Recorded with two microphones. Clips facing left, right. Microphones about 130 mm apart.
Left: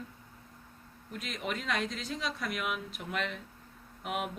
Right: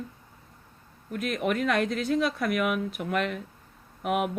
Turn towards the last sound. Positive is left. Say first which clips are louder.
# right 8 dB
turn(degrees=-55)  # may be behind; listen again after turning